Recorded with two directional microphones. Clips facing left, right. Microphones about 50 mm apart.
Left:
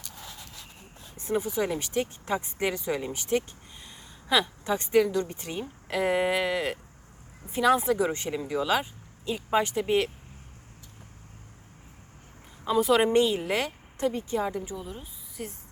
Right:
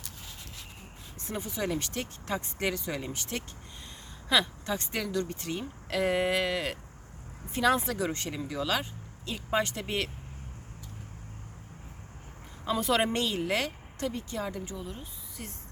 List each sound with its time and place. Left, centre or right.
1.2 s a woman's voice: centre
12.6 s speech: centre
14.1 s a woman's voice: left; by 15.5 s centre